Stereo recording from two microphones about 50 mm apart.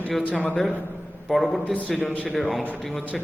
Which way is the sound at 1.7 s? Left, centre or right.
Left.